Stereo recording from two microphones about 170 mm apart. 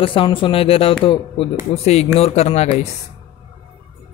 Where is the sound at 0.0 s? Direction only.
30° left (ahead or behind).